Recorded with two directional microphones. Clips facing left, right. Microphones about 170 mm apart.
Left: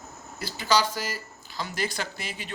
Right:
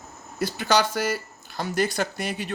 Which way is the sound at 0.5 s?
55° right (ahead or behind).